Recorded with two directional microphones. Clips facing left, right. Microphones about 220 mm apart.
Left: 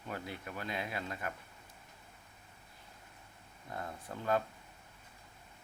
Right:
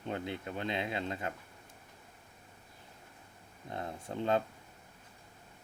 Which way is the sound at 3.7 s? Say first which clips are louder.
Right 3 dB; 25° right (ahead or behind).